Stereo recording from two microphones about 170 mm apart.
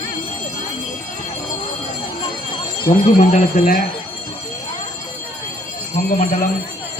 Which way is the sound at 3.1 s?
50° left (ahead or behind).